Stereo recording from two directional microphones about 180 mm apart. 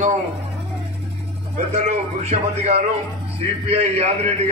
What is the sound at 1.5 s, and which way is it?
Speech, 40° right (ahead or behind).